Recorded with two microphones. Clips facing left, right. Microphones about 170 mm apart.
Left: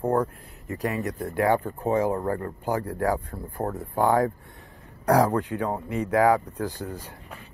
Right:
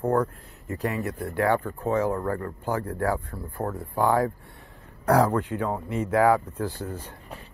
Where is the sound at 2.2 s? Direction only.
30° left (ahead or behind).